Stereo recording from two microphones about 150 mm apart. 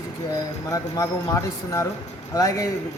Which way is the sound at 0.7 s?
20° left (ahead or behind).